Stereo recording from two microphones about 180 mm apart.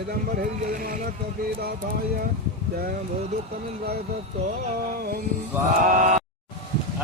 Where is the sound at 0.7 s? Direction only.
50° right (ahead or behind).